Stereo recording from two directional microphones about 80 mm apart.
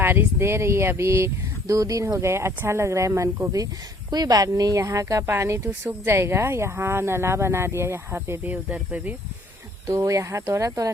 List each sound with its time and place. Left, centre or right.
0.0 s speech: right
8.4 s speech: centre
9.8 s speech: right